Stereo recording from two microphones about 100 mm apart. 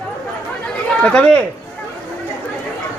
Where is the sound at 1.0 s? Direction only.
10° left (ahead or behind).